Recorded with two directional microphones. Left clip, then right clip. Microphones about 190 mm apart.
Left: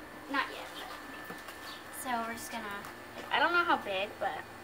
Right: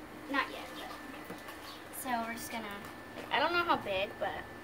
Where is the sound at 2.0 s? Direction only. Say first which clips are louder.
Left 1 dB; 10° right (ahead or behind).